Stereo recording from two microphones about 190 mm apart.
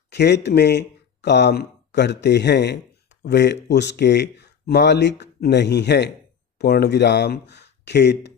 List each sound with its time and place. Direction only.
0.1 s speech: 60° left (ahead or behind)